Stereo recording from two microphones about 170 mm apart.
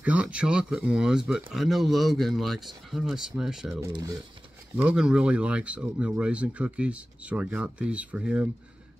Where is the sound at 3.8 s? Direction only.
20° right (ahead or behind).